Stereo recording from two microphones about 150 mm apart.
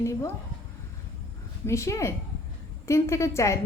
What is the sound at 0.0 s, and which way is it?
Speech, 20° left (ahead or behind).